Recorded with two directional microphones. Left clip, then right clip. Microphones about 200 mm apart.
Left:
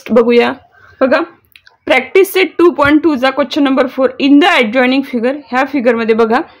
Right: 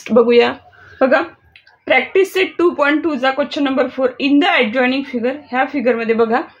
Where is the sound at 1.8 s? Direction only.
45° left (ahead or behind).